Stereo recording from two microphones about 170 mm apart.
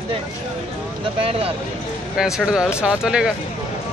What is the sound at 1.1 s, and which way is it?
Speech, 35° right (ahead or behind).